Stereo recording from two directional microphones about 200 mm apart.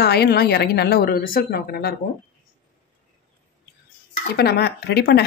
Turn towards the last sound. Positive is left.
turn(degrees=55)  # may be behind; listen again after turning